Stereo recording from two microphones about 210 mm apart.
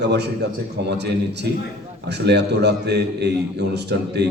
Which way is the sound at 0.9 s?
55° right (ahead or behind).